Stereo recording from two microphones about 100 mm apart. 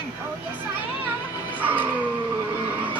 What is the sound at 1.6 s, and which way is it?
Music, 20° right (ahead or behind).